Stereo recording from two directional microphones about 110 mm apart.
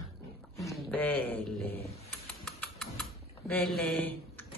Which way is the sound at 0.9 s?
15° left (ahead or behind).